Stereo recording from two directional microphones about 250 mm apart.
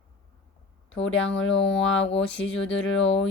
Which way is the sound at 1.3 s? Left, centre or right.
Centre.